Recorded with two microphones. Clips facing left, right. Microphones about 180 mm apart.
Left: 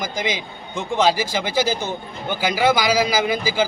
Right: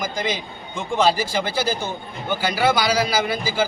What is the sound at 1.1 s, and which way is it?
A man's voice, 10° left (ahead or behind).